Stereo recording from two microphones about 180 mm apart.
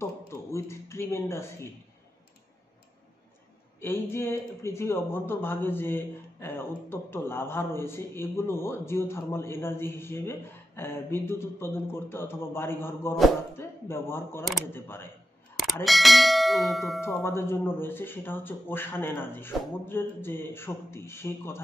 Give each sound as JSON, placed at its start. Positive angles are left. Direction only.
{"t": 0.0, "sound": "a sound", "side_deg": 15}
{"t": 3.8, "sound": "speech", "side_deg": 15}
{"t": 15.5, "sound": "clang", "side_deg": 0}
{"t": 17.2, "sound": "speech", "side_deg": 15}